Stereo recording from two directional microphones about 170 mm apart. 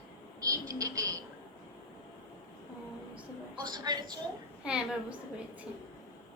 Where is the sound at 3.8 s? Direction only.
25° right (ahead or behind).